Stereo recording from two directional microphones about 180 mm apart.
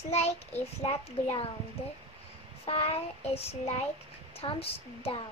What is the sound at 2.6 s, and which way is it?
Child singing, 30° left (ahead or behind).